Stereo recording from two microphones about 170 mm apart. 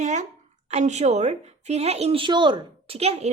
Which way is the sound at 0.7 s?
40° right (ahead or behind).